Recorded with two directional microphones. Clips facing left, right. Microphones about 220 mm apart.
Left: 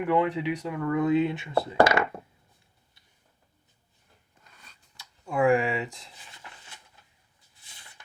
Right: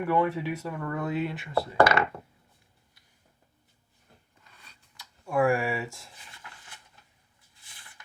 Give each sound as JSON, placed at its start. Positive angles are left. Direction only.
{"t": 0.0, "sound": "speech", "side_deg": 15}
{"t": 5.3, "sound": "speech", "side_deg": 20}